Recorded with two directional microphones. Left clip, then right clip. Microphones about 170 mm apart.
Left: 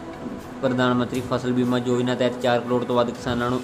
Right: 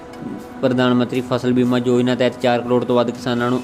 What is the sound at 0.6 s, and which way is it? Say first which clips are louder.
Speech: right 5 dB; 30° right (ahead or behind).